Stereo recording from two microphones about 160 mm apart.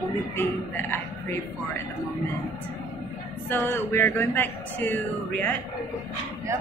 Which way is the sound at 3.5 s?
15° left (ahead or behind).